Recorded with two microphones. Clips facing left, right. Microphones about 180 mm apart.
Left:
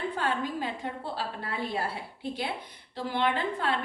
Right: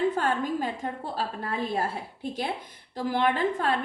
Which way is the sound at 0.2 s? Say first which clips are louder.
Right 4 dB; 45° right (ahead or behind).